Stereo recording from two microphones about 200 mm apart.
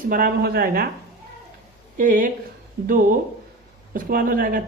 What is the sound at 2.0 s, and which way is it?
Speech, 40° right (ahead or behind).